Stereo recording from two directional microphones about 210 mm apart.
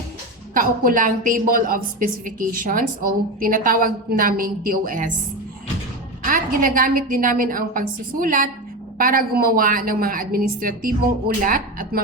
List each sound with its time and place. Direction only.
0.5 s a woman's voice: 40° right (ahead or behind)
6.2 s a woman's voice: 40° right (ahead or behind)